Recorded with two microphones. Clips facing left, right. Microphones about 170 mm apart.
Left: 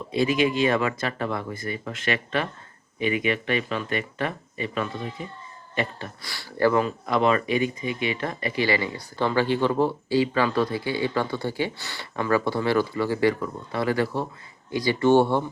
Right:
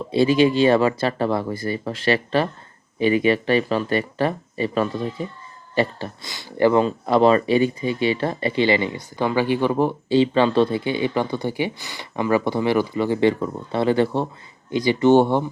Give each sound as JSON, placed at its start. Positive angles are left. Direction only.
{"t": 0.0, "sound": "speech", "side_deg": -30}
{"t": 6.2, "sound": "speech", "side_deg": -20}